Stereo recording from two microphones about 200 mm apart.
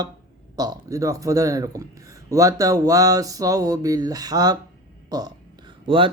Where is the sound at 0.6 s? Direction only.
20° right (ahead or behind).